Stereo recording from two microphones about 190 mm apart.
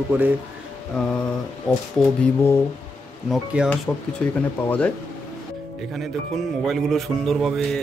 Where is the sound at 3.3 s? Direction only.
5° right (ahead or behind).